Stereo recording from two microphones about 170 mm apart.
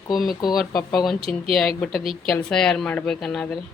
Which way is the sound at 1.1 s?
35° right (ahead or behind).